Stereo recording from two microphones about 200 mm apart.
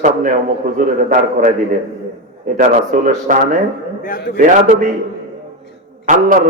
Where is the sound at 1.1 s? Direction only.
45° right (ahead or behind).